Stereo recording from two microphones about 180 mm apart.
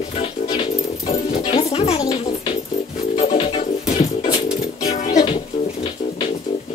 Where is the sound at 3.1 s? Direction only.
30° left (ahead or behind).